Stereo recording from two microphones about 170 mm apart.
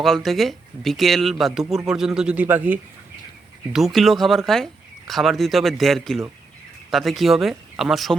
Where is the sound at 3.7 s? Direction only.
Centre (ahead or behind).